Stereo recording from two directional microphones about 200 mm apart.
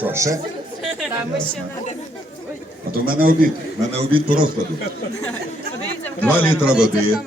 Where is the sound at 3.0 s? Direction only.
45° right (ahead or behind).